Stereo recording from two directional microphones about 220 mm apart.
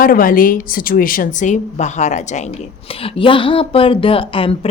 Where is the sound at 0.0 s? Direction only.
40° left (ahead or behind).